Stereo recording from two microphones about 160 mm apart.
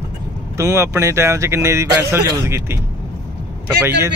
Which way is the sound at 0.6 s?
20° right (ahead or behind).